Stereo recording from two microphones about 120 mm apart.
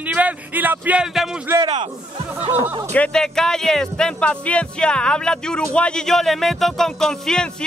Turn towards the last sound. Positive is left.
turn(degrees=5)  # may be behind; listen again after turning